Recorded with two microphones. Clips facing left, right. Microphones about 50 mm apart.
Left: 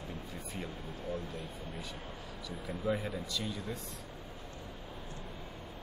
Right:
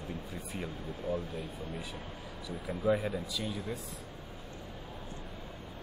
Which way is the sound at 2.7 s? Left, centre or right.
Centre.